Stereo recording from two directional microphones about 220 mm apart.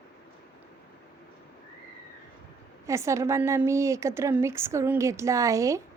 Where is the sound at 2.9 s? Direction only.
15° right (ahead or behind).